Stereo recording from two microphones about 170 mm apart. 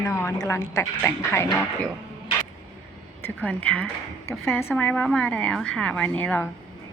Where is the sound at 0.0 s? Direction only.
15° left (ahead or behind).